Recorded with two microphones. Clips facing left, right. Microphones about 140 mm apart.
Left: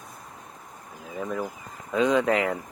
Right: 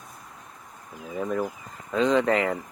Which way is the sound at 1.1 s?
Centre (ahead or behind).